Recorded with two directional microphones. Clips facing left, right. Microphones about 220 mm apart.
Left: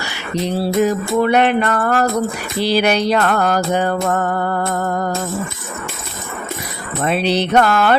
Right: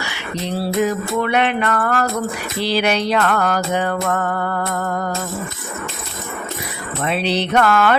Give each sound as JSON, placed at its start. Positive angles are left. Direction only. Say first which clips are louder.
{"t": 0.9, "sound": "music", "louder": "left 4 dB", "side_deg": 40}
{"t": 7.0, "sound": "music", "louder": "left 3 dB", "side_deg": 45}